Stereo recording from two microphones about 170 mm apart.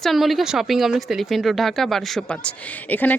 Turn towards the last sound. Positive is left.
turn(degrees=10)  # may be behind; listen again after turning